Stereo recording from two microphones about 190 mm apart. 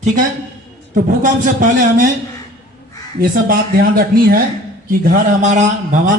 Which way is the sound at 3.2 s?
50° right (ahead or behind).